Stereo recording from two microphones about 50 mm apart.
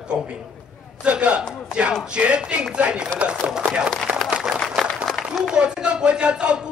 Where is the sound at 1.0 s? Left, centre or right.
Right.